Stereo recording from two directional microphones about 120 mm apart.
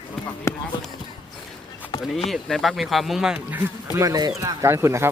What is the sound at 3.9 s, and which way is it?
Speech, 30° right (ahead or behind).